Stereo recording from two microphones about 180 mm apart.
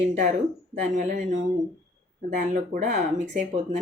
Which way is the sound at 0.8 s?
40° right (ahead or behind).